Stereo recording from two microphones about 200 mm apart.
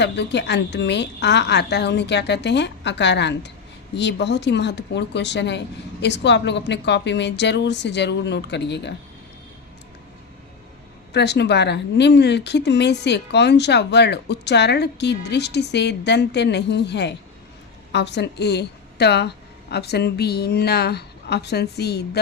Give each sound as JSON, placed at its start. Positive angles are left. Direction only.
{"t": 0.0, "sound": "speech", "side_deg": 60}
{"t": 11.1, "sound": "a woman's voice", "side_deg": 55}